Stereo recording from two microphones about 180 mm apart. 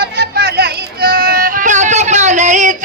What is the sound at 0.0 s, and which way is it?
Music, 60° right (ahead or behind).